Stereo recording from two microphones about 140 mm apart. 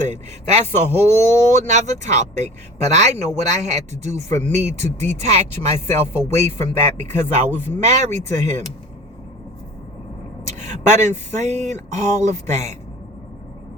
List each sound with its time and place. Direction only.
0.0 s a man's voice: 55° right (ahead or behind)
10.4 s a man's voice: 55° right (ahead or behind)